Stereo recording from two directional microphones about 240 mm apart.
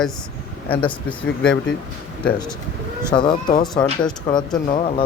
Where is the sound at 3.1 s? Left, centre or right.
Centre.